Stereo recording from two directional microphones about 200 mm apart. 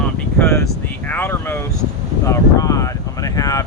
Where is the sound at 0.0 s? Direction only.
10° left (ahead or behind).